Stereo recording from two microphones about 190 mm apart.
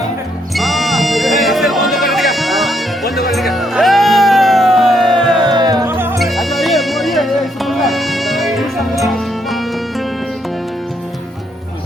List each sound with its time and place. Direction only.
0.5 s music: centre (ahead or behind)
5.5 s music: 20° right (ahead or behind)
6.1 s music: centre (ahead or behind)